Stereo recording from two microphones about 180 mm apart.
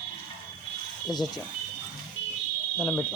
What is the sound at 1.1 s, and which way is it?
Speech, 20° left (ahead or behind).